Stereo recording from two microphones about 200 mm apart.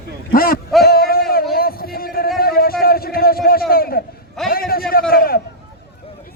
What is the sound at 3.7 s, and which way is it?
Speech, 50° left (ahead or behind).